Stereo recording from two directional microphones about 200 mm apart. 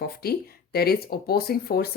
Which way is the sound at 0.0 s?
50° left (ahead or behind).